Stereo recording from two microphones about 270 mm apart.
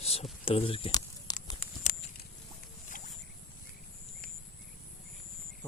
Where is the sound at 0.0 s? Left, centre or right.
Left.